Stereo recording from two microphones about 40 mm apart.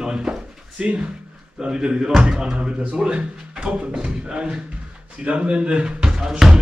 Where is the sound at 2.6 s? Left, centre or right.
Right.